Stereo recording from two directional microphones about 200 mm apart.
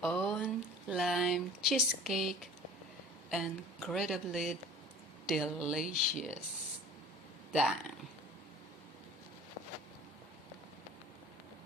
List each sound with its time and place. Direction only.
0.0 s a sound: 5° left (ahead or behind)
0.4 s a woman's voice: 5° right (ahead or behind)
5.8 s speech: 40° left (ahead or behind)
7.5 s a woman's voice: 5° right (ahead or behind)